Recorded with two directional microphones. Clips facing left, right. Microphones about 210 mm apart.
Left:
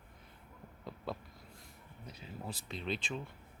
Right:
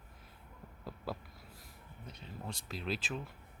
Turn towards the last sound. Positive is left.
turn(degrees=-5)  # may be behind; listen again after turning